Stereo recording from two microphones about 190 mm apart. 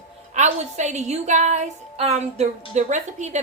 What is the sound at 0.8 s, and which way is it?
Speech, 40° right (ahead or behind).